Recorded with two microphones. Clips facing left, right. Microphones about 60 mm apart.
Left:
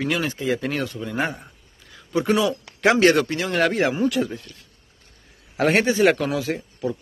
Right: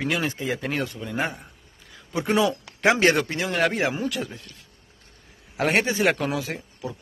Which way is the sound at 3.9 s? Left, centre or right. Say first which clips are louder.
Left 6 dB; centre.